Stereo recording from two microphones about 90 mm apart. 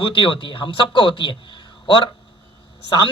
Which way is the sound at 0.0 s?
70° left (ahead or behind).